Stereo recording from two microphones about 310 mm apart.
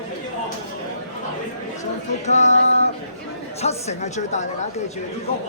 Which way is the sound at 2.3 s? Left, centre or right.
Left.